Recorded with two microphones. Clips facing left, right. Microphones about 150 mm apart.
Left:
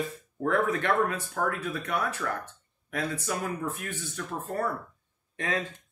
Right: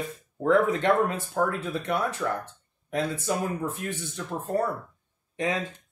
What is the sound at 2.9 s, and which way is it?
Speech, 25° right (ahead or behind).